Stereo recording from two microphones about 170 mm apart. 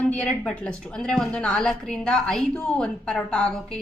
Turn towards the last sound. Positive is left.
turn(degrees=5)  # may be behind; listen again after turning